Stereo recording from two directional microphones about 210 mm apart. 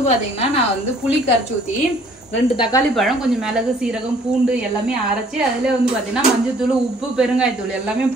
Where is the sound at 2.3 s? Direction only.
20° left (ahead or behind).